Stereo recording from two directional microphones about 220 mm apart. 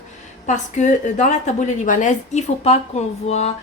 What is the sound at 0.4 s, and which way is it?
A woman's voice, 35° left (ahead or behind).